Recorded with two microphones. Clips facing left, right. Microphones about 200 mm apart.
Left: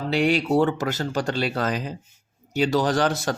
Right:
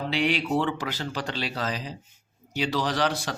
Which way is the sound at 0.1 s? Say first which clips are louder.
Left 6 dB; 45° left (ahead or behind).